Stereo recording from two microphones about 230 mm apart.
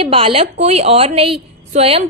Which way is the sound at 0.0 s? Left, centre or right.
Right.